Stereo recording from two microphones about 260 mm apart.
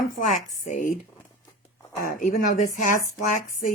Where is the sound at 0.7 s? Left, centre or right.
Left.